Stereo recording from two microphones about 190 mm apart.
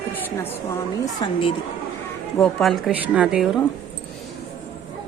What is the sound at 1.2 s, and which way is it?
Speech, 25° left (ahead or behind).